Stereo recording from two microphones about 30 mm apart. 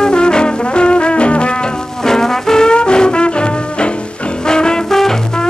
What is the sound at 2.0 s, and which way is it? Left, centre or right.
Music, centre.